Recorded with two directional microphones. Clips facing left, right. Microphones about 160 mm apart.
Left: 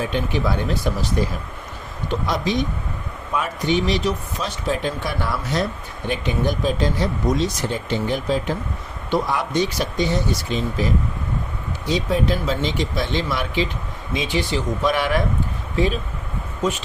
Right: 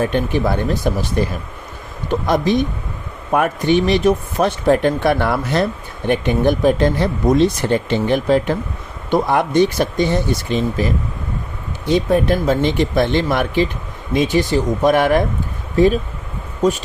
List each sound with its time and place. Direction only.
0.0 s speech: 55° right (ahead or behind)
2.0 s speech: 55° right (ahead or behind)
11.9 s speech: 55° right (ahead or behind)